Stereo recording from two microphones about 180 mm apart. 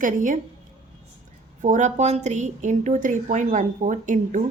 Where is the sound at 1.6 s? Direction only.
45° right (ahead or behind).